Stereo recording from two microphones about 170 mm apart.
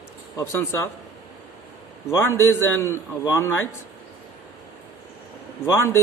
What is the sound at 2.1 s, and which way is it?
A man's voice, 15° left (ahead or behind).